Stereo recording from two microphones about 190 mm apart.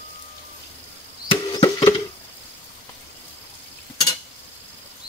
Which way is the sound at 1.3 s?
25° left (ahead or behind).